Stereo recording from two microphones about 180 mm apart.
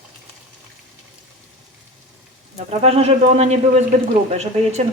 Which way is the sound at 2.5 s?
35° right (ahead or behind).